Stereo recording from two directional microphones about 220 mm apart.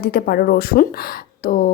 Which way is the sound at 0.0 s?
45° left (ahead or behind).